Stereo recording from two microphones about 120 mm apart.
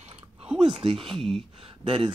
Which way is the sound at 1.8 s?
45° right (ahead or behind).